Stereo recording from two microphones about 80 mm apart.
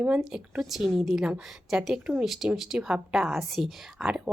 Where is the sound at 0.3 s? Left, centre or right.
Centre.